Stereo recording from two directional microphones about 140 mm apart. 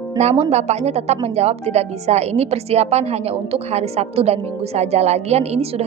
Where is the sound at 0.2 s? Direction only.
50° right (ahead or behind).